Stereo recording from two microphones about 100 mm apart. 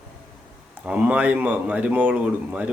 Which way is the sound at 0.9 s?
15° right (ahead or behind).